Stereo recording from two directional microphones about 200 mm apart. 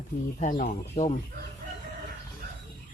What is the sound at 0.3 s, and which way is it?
Speech, 40° left (ahead or behind).